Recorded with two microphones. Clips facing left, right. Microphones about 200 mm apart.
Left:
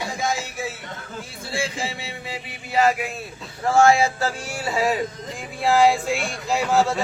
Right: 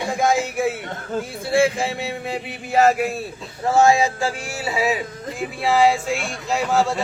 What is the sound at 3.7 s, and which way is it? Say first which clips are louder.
Speech: right 1 dB; 20° right (ahead or behind).